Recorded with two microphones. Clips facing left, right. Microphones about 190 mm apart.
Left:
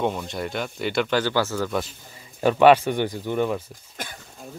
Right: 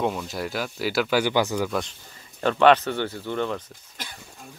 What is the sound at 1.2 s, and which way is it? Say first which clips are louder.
Speech: right 1 dB; 15° right (ahead or behind).